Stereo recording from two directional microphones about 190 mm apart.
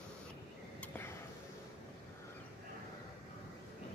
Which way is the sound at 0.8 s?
10° left (ahead or behind).